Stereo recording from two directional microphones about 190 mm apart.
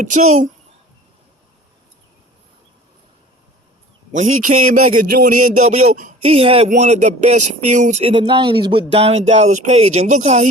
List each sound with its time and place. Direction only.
0.0 s a man's voice: 40° right (ahead or behind)
4.1 s a man's voice: 40° right (ahead or behind)